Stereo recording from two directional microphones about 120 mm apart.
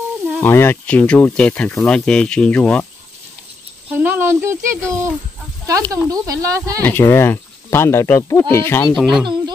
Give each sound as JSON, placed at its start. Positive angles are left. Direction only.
{"t": 0.4, "sound": "speech", "side_deg": 20}
{"t": 3.9, "sound": "speech", "side_deg": -15}
{"t": 6.8, "sound": "speech", "side_deg": 15}
{"t": 8.9, "sound": "speech", "side_deg": 0}